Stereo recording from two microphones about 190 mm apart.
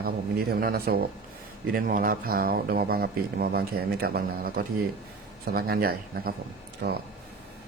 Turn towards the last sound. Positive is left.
turn(degrees=-55)  # may be behind; listen again after turning